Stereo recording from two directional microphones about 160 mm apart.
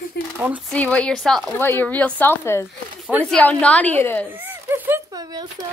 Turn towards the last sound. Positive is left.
turn(degrees=-25)  # may be behind; listen again after turning